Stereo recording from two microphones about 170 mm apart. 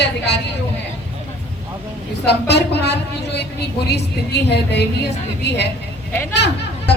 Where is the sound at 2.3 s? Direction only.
80° left.